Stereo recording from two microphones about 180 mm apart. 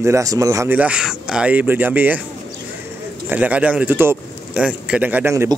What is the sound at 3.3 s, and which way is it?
A man's voice, 10° right (ahead or behind).